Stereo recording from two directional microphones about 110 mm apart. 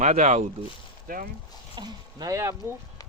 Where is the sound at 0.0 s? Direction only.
90° right.